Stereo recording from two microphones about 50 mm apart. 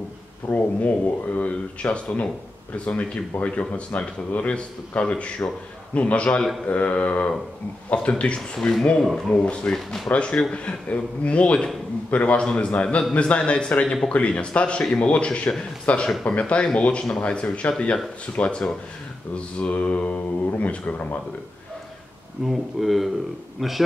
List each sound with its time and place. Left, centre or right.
0.5 s a man's voice: left
8.4 s speech: centre
9.3 s a man's voice: left
22.5 s speech: centre